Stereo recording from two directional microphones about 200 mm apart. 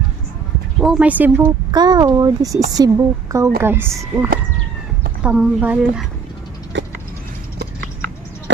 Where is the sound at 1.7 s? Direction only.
20° right (ahead or behind).